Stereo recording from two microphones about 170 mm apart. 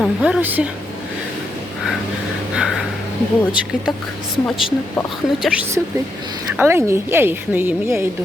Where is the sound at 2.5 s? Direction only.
5° right (ahead or behind).